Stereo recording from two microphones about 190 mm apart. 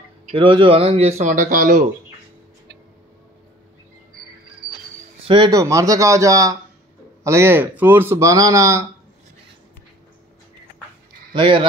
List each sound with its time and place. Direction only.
0.3 s speech: 25° right (ahead or behind); by 1.9 s 45° right (ahead or behind)
5.2 s speech: 25° right (ahead or behind)
11.3 s speech: 25° right (ahead or behind)